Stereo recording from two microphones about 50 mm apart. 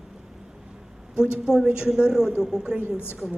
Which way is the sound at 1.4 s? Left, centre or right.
Centre.